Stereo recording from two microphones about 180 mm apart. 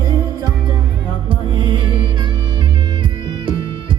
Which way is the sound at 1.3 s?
25° right (ahead or behind).